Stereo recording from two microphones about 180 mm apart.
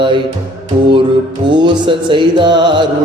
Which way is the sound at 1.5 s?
25° right (ahead or behind).